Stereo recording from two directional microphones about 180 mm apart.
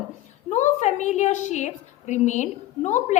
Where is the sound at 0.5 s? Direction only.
40° left (ahead or behind).